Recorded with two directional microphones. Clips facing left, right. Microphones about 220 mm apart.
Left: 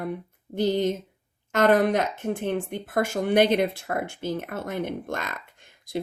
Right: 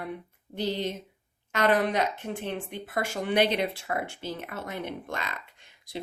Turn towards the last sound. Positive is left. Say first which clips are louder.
# left 7 dB
turn(degrees=50)  # may be behind; listen again after turning